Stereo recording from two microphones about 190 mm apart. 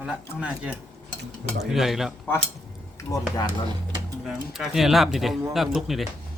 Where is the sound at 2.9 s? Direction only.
15° left (ahead or behind).